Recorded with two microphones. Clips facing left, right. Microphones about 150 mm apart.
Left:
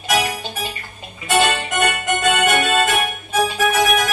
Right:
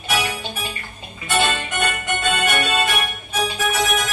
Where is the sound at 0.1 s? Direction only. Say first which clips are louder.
Left 3 dB; 40° left (ahead or behind).